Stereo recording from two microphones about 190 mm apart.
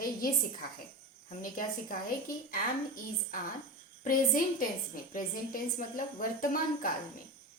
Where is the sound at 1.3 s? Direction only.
45° left (ahead or behind).